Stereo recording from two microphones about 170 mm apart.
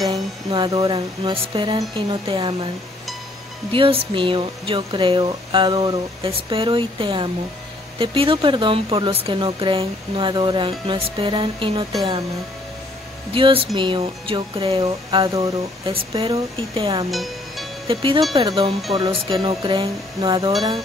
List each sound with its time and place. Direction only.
0.0 s speech: 25° right (ahead or behind)
3.7 s speech: 30° right (ahead or behind)
13.3 s speech: 30° right (ahead or behind)
17.1 s music: centre (ahead or behind)
17.8 s speech: 30° right (ahead or behind)